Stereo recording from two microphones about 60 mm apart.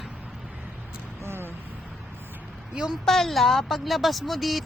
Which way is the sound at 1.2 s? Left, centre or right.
Right.